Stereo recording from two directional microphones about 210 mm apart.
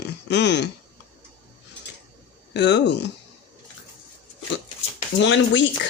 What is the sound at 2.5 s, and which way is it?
Speech, 55° left (ahead or behind).